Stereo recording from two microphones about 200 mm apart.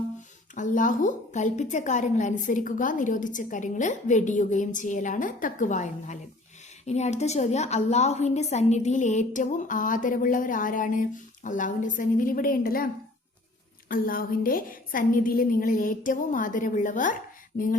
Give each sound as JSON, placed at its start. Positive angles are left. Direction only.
{"t": 0.5, "sound": "a woman's voice", "side_deg": 40}
{"t": 17.5, "sound": "a woman's voice", "side_deg": 50}